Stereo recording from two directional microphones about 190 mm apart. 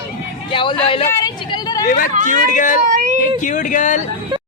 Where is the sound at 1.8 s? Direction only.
50° left (ahead or behind).